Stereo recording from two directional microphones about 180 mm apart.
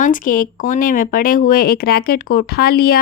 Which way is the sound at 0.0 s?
45° left (ahead or behind).